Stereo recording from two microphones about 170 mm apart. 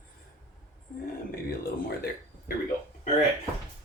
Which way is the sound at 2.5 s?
60° left (ahead or behind).